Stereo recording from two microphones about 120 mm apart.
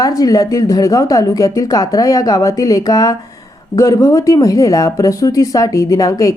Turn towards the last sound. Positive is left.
turn(degrees=25)  # may be behind; listen again after turning